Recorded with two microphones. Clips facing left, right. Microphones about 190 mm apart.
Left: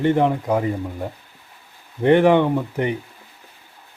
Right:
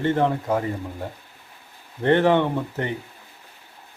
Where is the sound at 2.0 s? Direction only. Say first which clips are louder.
Left 4 dB; 15° left (ahead or behind).